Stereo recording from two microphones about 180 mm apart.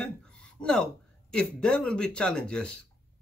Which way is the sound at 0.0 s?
5° left (ahead or behind).